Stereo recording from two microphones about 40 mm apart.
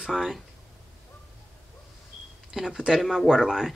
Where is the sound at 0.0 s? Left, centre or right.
Centre.